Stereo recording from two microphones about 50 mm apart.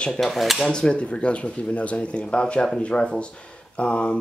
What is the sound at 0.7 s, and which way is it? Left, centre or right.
Speech, centre.